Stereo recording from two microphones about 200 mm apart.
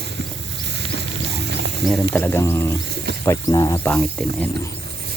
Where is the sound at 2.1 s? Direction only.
10° left (ahead or behind).